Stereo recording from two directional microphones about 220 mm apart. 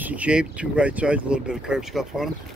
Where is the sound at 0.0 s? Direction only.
5° right (ahead or behind).